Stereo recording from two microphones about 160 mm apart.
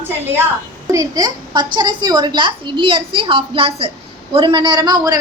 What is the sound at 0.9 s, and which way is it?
A woman's voice, 20° right (ahead or behind).